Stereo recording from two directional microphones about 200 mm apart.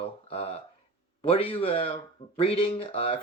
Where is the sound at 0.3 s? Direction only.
30° left (ahead or behind).